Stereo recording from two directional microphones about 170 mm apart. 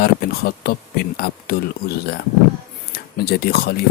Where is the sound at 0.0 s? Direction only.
65° left (ahead or behind).